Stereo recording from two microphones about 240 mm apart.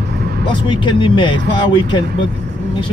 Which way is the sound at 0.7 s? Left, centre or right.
Centre.